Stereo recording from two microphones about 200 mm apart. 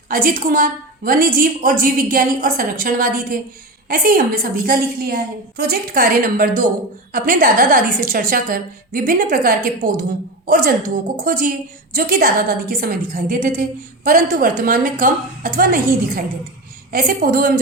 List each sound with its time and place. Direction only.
0.1 s a woman's voice: 45° right (ahead or behind)